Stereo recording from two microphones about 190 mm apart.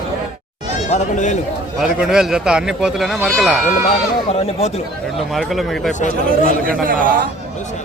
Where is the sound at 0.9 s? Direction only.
40° left (ahead or behind).